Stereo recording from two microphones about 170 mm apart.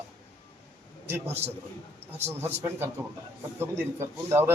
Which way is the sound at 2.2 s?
15° right (ahead or behind).